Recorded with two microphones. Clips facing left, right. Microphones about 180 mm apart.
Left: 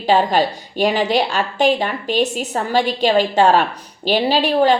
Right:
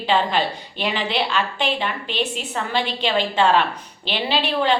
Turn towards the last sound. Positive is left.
turn(degrees=45)  # may be behind; listen again after turning